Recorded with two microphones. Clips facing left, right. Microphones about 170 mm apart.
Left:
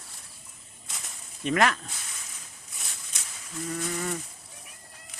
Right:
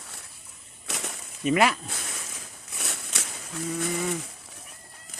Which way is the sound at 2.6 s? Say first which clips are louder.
Right 10 dB; 75° right (ahead or behind).